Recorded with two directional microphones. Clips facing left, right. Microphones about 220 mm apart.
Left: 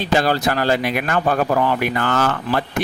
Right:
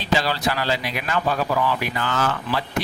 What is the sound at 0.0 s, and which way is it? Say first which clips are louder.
Speech: left 5 dB; 50° left (ahead or behind).